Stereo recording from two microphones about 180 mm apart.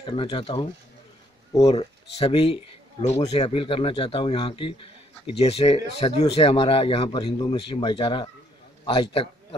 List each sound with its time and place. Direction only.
0.0 s speech: 30° left (ahead or behind)
1.7 s a man's voice: 35° left (ahead or behind)